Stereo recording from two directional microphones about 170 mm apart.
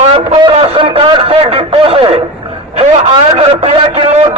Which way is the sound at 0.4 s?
30° right (ahead or behind).